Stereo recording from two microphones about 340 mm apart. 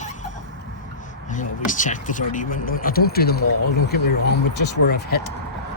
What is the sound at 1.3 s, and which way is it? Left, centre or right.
Speech, left.